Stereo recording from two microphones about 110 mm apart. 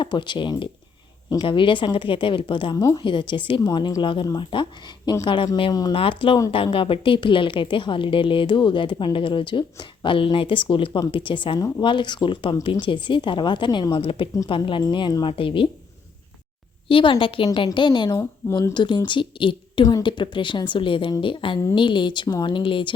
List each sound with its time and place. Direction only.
0.0 s a woman's voice: 45° left (ahead or behind)
2.7 s a woman's voice: 30° left (ahead or behind)
3.0 s a woman's voice: 45° left (ahead or behind)
13.9 s a woman's voice: 55° left (ahead or behind)
16.9 s a woman's voice: 50° left (ahead or behind)